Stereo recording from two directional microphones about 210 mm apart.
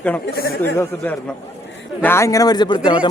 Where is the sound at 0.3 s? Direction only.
45° left (ahead or behind).